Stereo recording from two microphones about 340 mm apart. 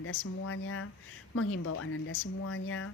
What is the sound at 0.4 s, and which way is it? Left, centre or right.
Speech, left.